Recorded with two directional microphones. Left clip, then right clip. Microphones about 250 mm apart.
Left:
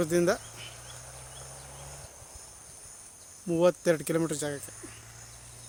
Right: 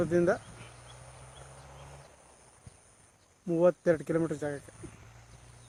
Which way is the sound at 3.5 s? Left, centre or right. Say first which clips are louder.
Left 1 dB; centre.